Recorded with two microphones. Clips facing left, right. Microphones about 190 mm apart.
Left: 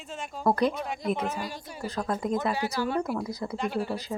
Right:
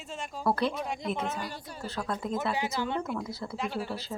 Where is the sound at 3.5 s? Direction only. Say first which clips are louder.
Left 4 dB; centre (ahead or behind).